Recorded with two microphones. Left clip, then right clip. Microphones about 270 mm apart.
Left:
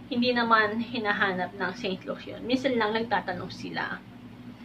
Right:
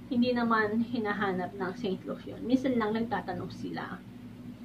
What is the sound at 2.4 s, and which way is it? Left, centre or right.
Speech, centre.